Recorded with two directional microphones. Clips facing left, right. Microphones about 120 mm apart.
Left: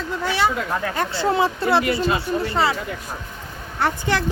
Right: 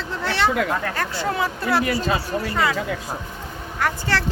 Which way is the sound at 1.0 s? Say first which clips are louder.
Left 4 dB; 25° left (ahead or behind).